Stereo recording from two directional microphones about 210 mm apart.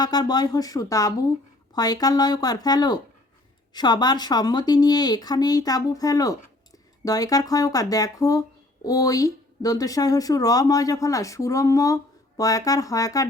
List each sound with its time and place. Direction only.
0.0 s speech: 20° left (ahead or behind)